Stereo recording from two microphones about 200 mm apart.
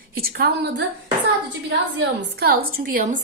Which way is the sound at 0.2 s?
50° right (ahead or behind).